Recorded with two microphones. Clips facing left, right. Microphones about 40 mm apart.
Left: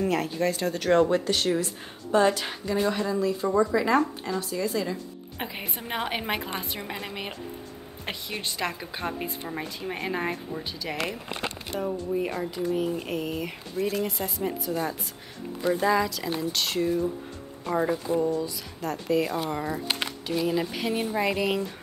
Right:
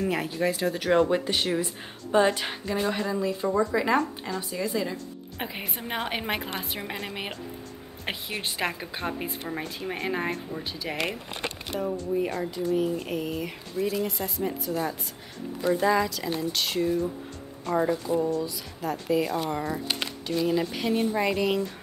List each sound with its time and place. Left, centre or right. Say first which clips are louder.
0.1 s speech: left 1 dB; centre
8.9 s speech: even; centre
11.8 s speech: right 1 dB; centre
13.7 s speech: even; left
14.0 s speech: even; centre